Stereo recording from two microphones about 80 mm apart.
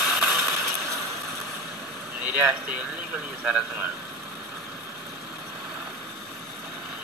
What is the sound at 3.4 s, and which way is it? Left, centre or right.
Speech, centre.